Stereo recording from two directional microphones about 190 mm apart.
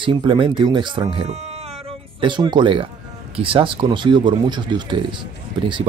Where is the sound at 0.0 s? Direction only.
25° right (ahead or behind).